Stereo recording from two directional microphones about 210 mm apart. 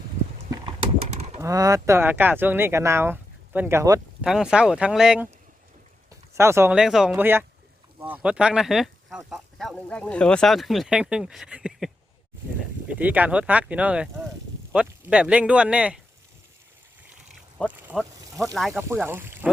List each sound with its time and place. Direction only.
1.1 s bird: 30° right (ahead or behind)
1.4 s speech: 15° right (ahead or behind)
12.9 s speech: 5° right (ahead or behind)
17.8 s ratchet: centre (ahead or behind)
18.7 s speech: 10° right (ahead or behind)